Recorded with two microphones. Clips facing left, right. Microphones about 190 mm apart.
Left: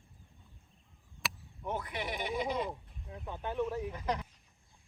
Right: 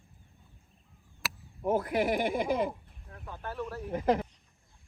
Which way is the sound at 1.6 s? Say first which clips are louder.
Right 10 dB; 50° right (ahead or behind).